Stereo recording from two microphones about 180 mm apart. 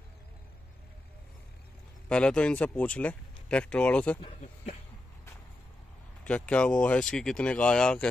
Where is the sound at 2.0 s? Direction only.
5° left (ahead or behind).